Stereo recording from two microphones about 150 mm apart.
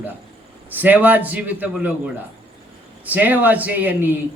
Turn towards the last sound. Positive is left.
turn(degrees=-10)  # may be behind; listen again after turning